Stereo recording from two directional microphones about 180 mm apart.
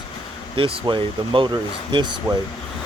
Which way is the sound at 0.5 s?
30° right (ahead or behind).